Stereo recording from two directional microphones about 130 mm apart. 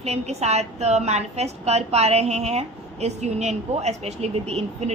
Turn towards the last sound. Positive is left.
turn(degrees=-55)  # may be behind; listen again after turning